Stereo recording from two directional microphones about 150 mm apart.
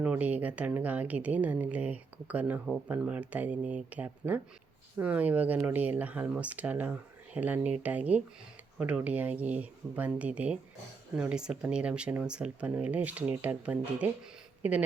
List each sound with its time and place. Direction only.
0.0 s speech: 10° right (ahead or behind)